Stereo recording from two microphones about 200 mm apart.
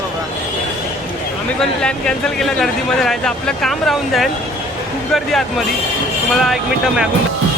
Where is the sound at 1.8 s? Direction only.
5° left (ahead or behind).